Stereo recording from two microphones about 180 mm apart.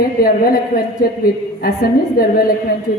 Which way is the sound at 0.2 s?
55° left (ahead or behind).